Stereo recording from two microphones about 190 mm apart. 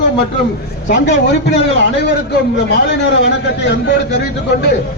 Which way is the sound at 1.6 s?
65° left (ahead or behind).